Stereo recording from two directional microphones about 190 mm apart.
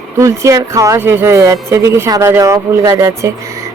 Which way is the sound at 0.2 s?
15° right (ahead or behind).